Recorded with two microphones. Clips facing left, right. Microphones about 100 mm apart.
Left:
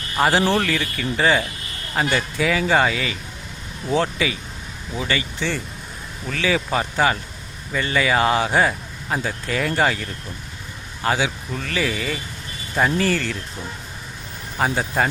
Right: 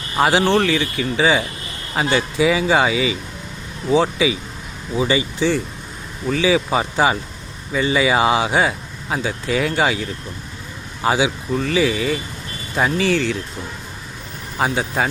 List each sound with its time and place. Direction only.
0.2 s speech: centre (ahead or behind)
14.6 s speech: 5° right (ahead or behind)